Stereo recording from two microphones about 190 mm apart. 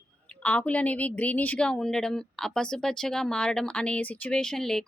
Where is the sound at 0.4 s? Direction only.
5° left (ahead or behind).